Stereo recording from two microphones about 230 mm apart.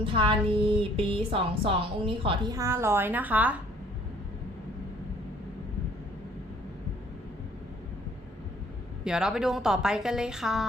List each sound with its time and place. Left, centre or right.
0.0 s a woman's voice: right
9.0 s a woman's voice: centre